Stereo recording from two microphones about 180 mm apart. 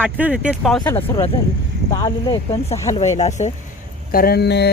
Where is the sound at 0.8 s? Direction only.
10° left (ahead or behind).